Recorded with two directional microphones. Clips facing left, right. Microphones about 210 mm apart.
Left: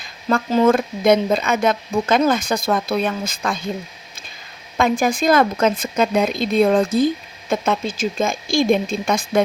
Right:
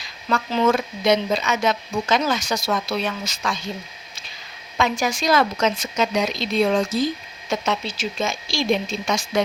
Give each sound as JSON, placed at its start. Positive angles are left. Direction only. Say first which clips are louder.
{"t": 0.0, "sound": "speech", "louder": "left 4 dB", "side_deg": 50}
{"t": 4.8, "sound": "speech", "louder": "left 5 dB", "side_deg": 55}